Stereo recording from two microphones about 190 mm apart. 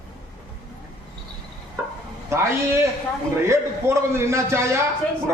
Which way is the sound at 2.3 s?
15° right (ahead or behind).